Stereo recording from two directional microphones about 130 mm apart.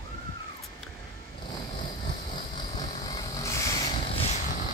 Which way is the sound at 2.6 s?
35° left (ahead or behind).